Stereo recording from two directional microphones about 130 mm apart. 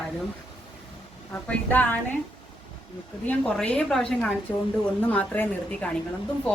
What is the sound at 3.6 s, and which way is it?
A woman's voice, 5° left (ahead or behind).